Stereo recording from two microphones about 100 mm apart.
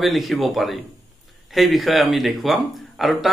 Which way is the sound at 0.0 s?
Centre (ahead or behind).